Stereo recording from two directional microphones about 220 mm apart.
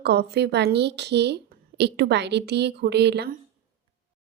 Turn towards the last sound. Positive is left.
turn(degrees=-50)  # may be behind; listen again after turning